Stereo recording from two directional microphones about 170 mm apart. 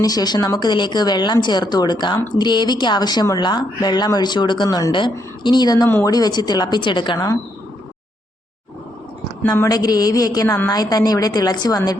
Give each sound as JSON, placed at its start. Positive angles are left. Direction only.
{"t": 0.0, "sound": "speech", "side_deg": 25}
{"t": 9.5, "sound": "speech", "side_deg": 20}